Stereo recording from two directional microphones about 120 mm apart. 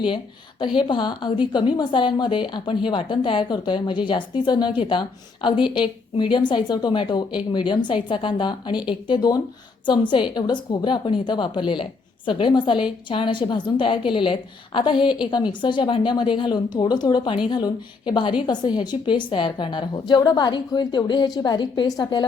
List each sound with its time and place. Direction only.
0.6 s a woman's voice: 40° left (ahead or behind)